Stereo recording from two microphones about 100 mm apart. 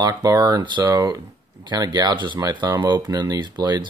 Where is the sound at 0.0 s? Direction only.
40° right (ahead or behind).